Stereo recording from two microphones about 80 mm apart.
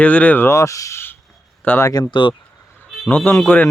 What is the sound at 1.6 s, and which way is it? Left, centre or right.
Speech, left.